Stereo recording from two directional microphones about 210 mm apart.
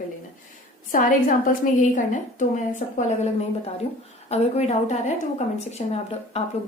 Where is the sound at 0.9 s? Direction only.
40° left (ahead or behind).